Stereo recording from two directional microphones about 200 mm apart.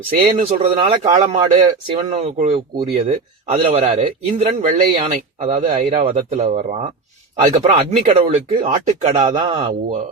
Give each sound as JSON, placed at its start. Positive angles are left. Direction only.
{"t": 0.3, "sound": "speech", "side_deg": -30}